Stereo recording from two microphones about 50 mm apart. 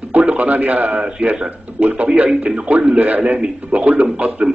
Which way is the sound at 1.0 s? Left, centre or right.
Right.